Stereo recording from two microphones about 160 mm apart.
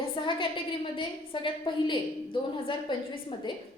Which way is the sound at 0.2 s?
30° left (ahead or behind).